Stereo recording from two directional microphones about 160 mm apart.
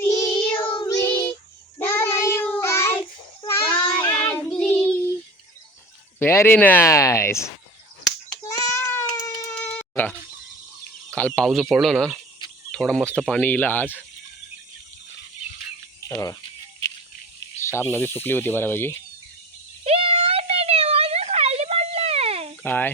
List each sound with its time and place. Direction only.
0.0 s child singing: 20° left (ahead or behind)
0.5 s child singing: 30° left (ahead or behind)
1.0 s child singing: 15° left (ahead or behind)
4.2 s child singing: 10° left (ahead or behind)
6.1 s speech: 15° left (ahead or behind)
8.4 s baby cry: 20° left (ahead or behind)
9.6 s a sound: 10° left (ahead or behind)
11.1 s speech: 10° left (ahead or behind)
16.0 s speech: 20° left (ahead or behind)
17.6 s speech: 15° left (ahead or behind)
19.8 s a sound: 35° right (ahead or behind)
22.6 s speech: 10° left (ahead or behind)